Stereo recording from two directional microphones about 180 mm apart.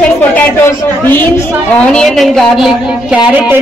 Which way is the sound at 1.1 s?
10° left (ahead or behind).